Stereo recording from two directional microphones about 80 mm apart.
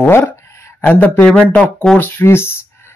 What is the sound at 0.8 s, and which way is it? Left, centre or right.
Speech, centre.